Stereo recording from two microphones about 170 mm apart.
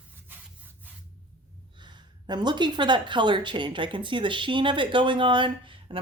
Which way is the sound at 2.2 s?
25° right (ahead or behind).